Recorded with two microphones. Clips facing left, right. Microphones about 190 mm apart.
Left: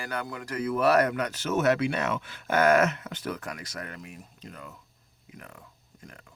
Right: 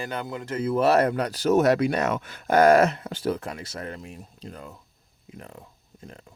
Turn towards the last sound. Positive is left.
turn(degrees=-30)  # may be behind; listen again after turning